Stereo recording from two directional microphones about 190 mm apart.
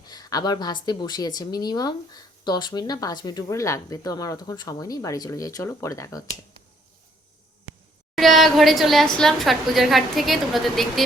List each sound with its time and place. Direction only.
0.1 s a woman's voice: 20° left (ahead or behind)
8.1 s a woman's voice: centre (ahead or behind)